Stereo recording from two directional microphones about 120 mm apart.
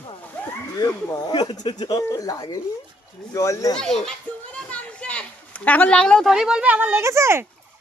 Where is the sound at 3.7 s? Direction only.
5° left (ahead or behind).